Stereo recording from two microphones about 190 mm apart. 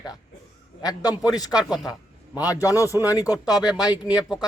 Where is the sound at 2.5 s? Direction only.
15° left (ahead or behind).